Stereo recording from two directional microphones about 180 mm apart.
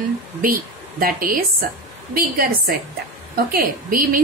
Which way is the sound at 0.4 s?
50° right (ahead or behind).